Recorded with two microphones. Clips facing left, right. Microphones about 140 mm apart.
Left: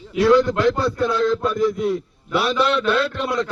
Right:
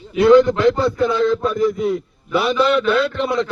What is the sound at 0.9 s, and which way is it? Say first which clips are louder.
A man's voice: right 2 dB; centre (ahead or behind).